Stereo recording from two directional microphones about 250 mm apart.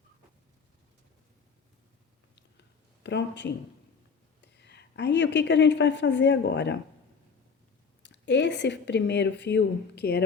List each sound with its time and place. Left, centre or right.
3.0 s a woman's voice: left
8.0 s speech: left